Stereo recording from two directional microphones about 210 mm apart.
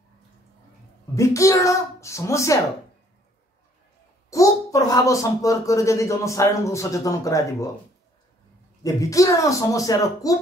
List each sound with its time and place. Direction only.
1.1 s speech: 15° left (ahead or behind)
4.3 s speech: 15° left (ahead or behind)
8.8 s speech: 15° left (ahead or behind)